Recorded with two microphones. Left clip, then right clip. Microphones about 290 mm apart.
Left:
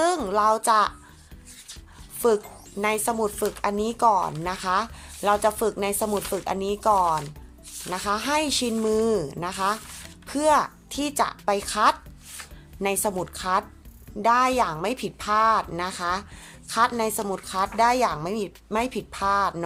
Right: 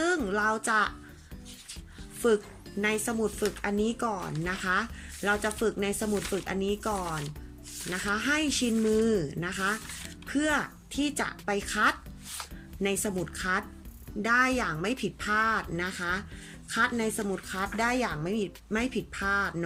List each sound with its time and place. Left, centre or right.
0.0 s speech: centre
2.8 s speech: centre
7.9 s speech: centre
17.2 s speech: left
17.4 s speech: centre